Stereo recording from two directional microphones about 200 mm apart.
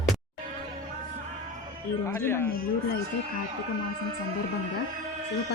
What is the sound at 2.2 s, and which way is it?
Speech, 10° left (ahead or behind).